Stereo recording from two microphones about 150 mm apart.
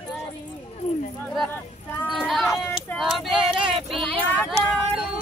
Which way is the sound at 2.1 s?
Centre (ahead or behind).